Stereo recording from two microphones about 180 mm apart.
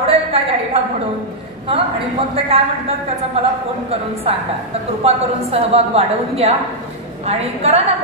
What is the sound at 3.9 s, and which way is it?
A woman's voice, 35° right (ahead or behind).